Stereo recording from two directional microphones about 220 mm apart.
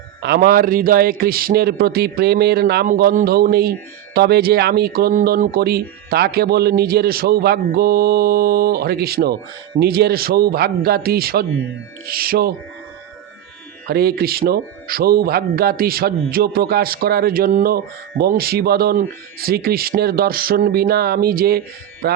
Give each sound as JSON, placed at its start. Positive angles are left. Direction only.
{"t": 0.2, "sound": "a man's voice", "side_deg": -45}
{"t": 13.8, "sound": "a man's voice", "side_deg": -45}